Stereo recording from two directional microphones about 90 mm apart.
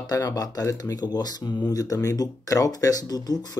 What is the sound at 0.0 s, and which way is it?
Speech, 40° left (ahead or behind).